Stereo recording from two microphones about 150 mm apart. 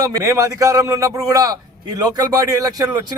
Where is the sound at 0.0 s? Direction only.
20° right (ahead or behind).